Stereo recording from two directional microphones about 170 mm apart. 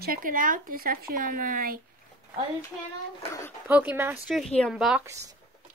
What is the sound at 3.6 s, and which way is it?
Speech, 10° right (ahead or behind).